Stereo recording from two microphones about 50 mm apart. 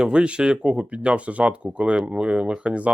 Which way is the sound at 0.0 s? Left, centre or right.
Centre.